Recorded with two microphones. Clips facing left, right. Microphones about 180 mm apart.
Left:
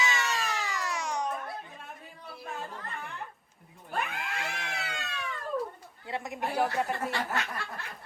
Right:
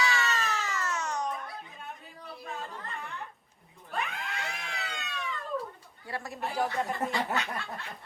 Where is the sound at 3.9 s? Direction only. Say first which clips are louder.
Left 1 dB; centre (ahead or behind).